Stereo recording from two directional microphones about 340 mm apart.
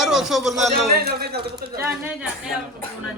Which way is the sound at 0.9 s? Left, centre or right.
Right.